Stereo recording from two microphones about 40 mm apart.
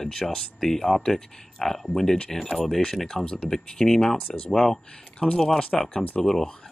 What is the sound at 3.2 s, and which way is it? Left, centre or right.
Speech, left.